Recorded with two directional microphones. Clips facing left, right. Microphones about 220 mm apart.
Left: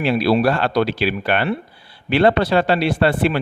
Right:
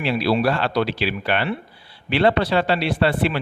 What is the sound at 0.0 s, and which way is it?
Speech, 50° left (ahead or behind).